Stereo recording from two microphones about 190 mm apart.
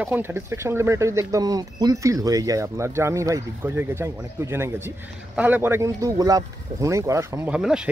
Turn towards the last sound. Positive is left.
turn(degrees=-5)  # may be behind; listen again after turning